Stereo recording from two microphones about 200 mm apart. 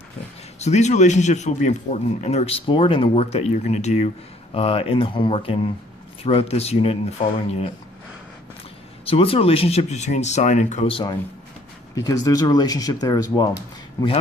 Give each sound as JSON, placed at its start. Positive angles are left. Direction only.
{"t": 0.6, "sound": "speech", "side_deg": 35}
{"t": 9.0, "sound": "speech", "side_deg": 30}